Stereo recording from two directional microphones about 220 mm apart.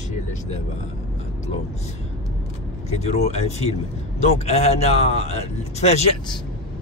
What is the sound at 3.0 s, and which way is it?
Speech, 30° left (ahead or behind).